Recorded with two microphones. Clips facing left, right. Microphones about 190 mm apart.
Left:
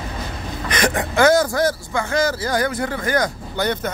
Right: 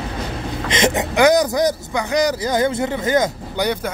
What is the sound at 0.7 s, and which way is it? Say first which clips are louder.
Speech: right 2 dB; 25° right (ahead or behind).